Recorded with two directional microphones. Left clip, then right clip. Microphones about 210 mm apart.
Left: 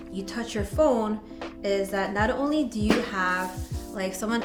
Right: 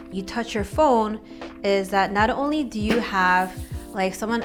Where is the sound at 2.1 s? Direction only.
90° right.